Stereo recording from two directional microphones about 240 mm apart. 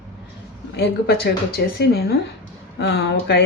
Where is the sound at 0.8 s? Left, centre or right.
Left.